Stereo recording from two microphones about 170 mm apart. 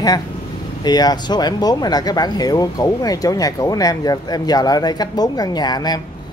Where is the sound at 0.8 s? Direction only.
25° left (ahead or behind).